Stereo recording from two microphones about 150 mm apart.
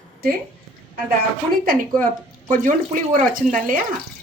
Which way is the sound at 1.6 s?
70° right (ahead or behind).